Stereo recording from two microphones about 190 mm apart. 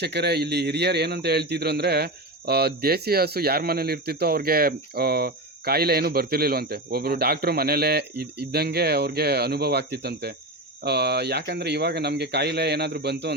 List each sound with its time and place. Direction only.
0.0 s a man's voice: 60° right (ahead or behind)